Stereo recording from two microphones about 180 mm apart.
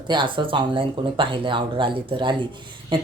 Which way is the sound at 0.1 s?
25° right (ahead or behind).